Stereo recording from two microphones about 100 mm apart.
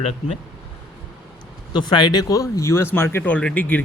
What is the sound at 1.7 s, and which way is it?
Speech, 50° left (ahead or behind).